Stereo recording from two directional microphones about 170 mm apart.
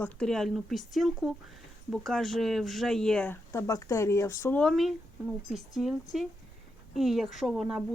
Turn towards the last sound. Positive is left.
turn(degrees=-5)  # may be behind; listen again after turning